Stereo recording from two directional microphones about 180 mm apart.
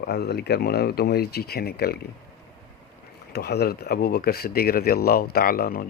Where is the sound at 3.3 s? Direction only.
65° left (ahead or behind).